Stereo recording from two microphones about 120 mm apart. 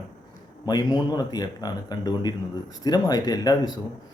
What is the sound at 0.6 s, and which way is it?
Speech, 35° left (ahead or behind).